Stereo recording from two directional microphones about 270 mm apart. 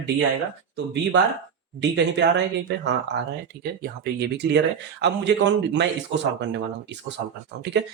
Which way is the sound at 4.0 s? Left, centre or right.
Right.